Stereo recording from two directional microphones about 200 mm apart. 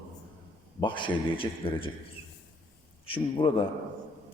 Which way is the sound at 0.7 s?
25° left (ahead or behind).